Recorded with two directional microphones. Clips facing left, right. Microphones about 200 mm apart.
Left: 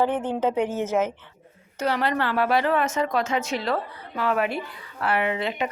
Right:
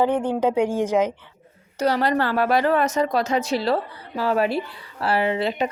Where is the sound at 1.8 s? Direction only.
40° right (ahead or behind).